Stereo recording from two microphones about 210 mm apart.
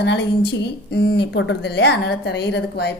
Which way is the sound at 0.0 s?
55° left (ahead or behind).